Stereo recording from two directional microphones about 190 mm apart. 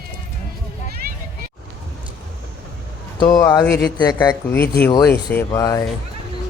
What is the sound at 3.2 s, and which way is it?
A man's voice, 20° left (ahead or behind).